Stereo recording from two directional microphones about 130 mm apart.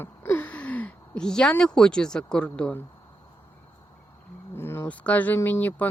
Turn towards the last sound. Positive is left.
turn(degrees=15)  # may be behind; listen again after turning